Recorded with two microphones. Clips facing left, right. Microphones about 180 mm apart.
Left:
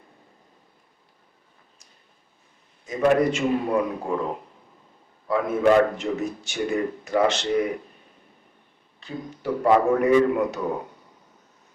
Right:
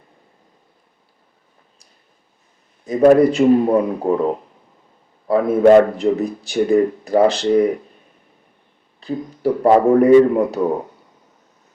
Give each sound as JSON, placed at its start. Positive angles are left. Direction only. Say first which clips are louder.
{"t": 2.8, "sound": "a man's voice", "louder": "right 9 dB", "side_deg": -35}
{"t": 5.3, "sound": "a man's voice", "louder": "right 8 dB", "side_deg": -35}
{"t": 9.0, "sound": "a man's voice", "louder": "right 9 dB", "side_deg": -35}